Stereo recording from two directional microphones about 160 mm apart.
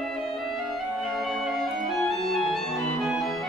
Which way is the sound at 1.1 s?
Centre (ahead or behind).